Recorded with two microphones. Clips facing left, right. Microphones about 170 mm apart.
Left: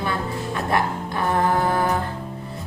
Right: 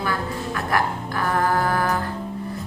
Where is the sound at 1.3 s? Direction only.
25° left (ahead or behind).